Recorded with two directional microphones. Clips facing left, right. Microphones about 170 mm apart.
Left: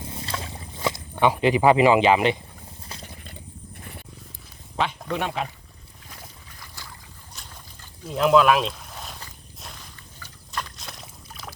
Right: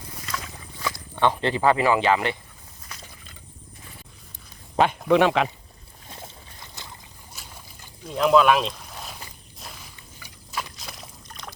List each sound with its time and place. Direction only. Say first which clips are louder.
0.1 s boat: even; 25° left (ahead or behind)
1.1 s speech: left 3 dB; 10° left (ahead or behind)
2.9 s mechanisms: left 3 dB; 30° left (ahead or behind)
5.0 s speech: right 9 dB; 90° right
6.1 s boat: right 4 dB; 25° right (ahead or behind)
7.3 s boat: right 1 dB; 10° right (ahead or behind)
8.0 s speech: even; centre (ahead or behind)
9.6 s rowboat: even; 5° right (ahead or behind)